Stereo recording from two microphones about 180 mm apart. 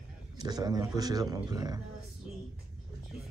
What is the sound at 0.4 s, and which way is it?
Speech, 20° right (ahead or behind).